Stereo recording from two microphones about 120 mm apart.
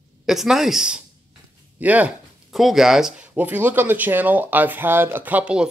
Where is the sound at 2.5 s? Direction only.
Centre (ahead or behind).